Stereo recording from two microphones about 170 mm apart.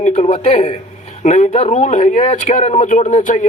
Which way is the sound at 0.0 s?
40° left (ahead or behind).